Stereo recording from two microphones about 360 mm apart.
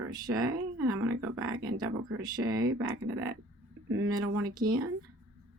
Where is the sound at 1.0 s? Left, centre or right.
Right.